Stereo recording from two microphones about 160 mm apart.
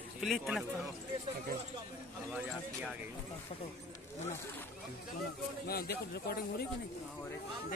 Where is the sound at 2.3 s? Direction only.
5° right (ahead or behind).